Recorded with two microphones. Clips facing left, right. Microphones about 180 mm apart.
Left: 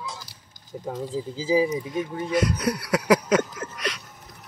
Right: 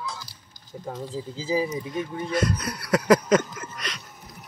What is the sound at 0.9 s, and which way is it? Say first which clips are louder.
Speech: left 3 dB; 10° left (ahead or behind).